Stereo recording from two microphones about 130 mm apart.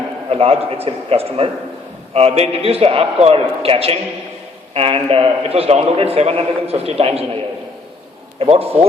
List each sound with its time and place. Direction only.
0.3 s a man's voice: 50° right (ahead or behind)
8.4 s a man's voice: 50° right (ahead or behind)